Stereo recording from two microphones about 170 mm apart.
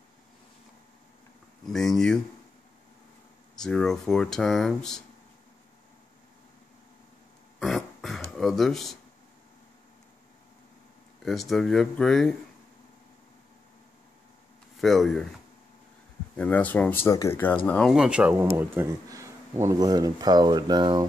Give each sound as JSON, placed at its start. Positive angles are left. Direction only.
{"t": 1.7, "sound": "speech", "side_deg": 0}
{"t": 3.5, "sound": "speech", "side_deg": 5}
{"t": 7.5, "sound": "a sound", "side_deg": 0}
{"t": 8.4, "sound": "speech", "side_deg": 0}
{"t": 11.2, "sound": "speech", "side_deg": 0}
{"t": 14.8, "sound": "speech", "side_deg": 0}
{"t": 16.3, "sound": "speech", "side_deg": 10}
{"t": 17.9, "sound": "speech", "side_deg": -5}